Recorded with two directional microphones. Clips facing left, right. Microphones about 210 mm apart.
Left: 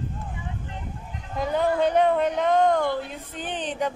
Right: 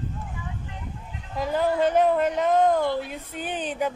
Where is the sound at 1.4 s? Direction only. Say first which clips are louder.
Even; 5° right (ahead or behind).